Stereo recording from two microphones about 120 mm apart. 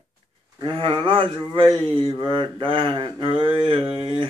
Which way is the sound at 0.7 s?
45° right (ahead or behind).